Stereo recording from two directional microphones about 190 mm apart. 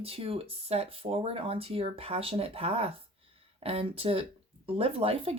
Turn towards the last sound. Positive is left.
turn(degrees=-30)  # may be behind; listen again after turning